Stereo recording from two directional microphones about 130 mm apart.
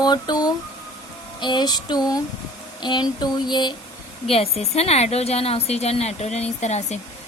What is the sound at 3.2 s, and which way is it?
Speech, 35° left (ahead or behind).